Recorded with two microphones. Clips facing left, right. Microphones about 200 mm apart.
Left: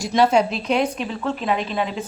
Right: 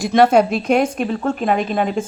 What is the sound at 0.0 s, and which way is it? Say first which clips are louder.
Speech: right 4 dB; 55° right (ahead or behind).